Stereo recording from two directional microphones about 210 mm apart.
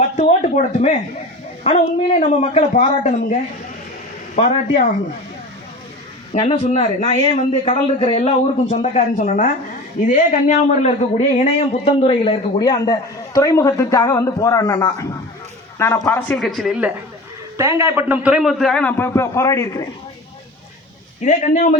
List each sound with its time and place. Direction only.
0.2 s a sound: 35° left (ahead or behind)
1.6 s speech: 35° left (ahead or behind)
4.4 s speech: 35° left (ahead or behind)
6.4 s a man's voice: 30° left (ahead or behind)
21.2 s speech: 35° left (ahead or behind)